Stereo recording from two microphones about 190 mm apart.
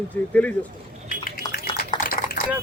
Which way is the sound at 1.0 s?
50° left (ahead or behind).